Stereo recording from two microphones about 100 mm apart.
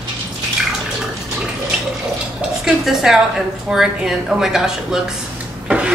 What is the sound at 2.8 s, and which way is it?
A woman's voice, 5° right (ahead or behind).